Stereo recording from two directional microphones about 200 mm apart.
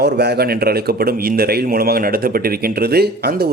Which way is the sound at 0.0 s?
55° right (ahead or behind).